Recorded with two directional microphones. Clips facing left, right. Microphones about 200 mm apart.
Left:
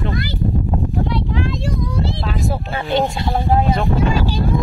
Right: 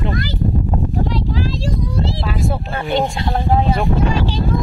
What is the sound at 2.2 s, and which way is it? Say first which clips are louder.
Speech: right 1 dB; centre (ahead or behind).